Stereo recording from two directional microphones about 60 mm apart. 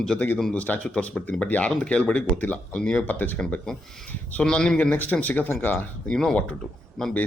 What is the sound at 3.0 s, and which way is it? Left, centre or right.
Speech, left.